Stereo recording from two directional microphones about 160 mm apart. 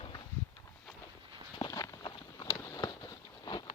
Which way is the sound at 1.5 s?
25° left (ahead or behind).